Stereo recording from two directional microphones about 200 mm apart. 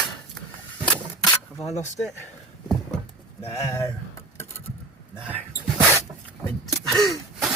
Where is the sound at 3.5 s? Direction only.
15° left (ahead or behind).